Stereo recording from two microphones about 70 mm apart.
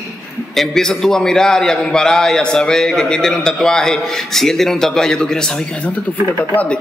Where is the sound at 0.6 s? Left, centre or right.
Centre.